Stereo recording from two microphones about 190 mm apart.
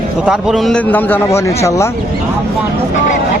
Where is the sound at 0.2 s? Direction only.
5° right (ahead or behind); by 2.0 s 15° left (ahead or behind).